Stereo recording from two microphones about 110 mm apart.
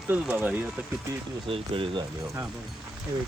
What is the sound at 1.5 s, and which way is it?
Speech, 55° right (ahead or behind).